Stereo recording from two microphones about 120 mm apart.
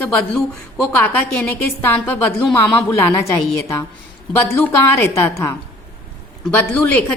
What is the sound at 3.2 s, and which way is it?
Speech, 25° left (ahead or behind).